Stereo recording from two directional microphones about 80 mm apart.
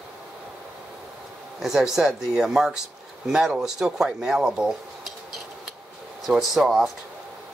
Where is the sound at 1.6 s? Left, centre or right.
Centre.